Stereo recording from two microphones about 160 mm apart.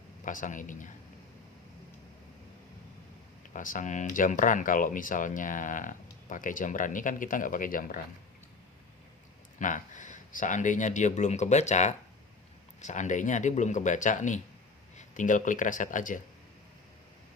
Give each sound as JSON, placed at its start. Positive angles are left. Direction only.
{"t": 0.3, "sound": "speech", "side_deg": 55}
{"t": 3.5, "sound": "speech", "side_deg": 55}
{"t": 9.6, "sound": "speech", "side_deg": 55}